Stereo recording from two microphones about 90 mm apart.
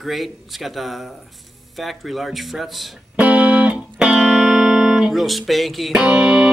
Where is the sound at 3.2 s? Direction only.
15° right (ahead or behind).